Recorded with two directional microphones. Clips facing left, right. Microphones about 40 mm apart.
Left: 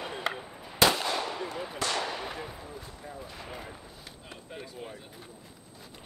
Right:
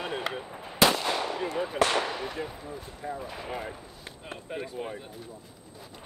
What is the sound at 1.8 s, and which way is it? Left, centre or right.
Basketball bounce, right.